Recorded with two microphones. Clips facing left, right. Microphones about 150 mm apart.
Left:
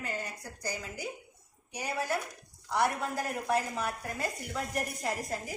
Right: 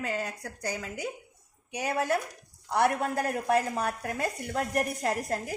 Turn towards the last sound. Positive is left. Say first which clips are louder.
# right 5 dB
turn(degrees=-65)  # may be behind; listen again after turning